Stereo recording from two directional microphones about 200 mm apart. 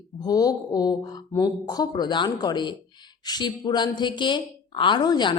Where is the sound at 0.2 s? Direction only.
20° left (ahead or behind).